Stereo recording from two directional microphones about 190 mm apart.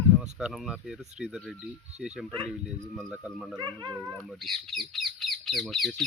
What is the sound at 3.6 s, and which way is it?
Speech, 20° right (ahead or behind).